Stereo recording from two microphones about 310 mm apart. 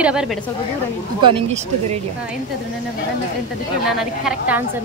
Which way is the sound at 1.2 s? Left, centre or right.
Centre.